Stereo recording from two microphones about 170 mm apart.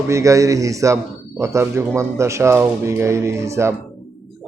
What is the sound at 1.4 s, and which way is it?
Speech, 15° right (ahead or behind).